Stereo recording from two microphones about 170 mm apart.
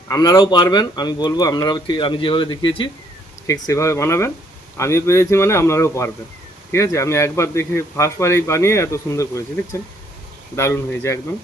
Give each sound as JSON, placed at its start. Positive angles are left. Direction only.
{"t": 0.1, "sound": "speech", "side_deg": 20}
{"t": 10.5, "sound": "speech", "side_deg": 15}